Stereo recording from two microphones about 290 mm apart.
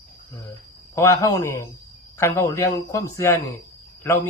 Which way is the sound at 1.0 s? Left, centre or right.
Centre.